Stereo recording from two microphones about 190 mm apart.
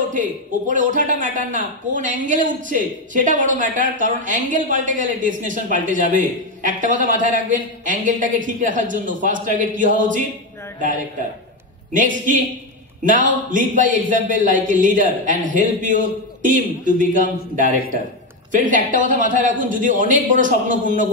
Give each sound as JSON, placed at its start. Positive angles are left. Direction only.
{"t": 0.1, "sound": "speech", "side_deg": -45}
{"t": 11.9, "sound": "speech", "side_deg": -45}